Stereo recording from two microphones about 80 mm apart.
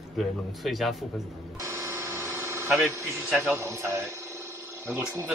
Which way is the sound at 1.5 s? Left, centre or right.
Right.